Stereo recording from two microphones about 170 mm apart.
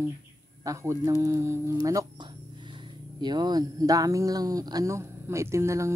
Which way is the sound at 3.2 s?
25° right (ahead or behind).